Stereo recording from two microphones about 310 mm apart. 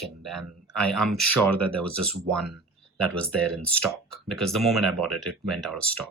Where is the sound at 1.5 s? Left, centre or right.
Right.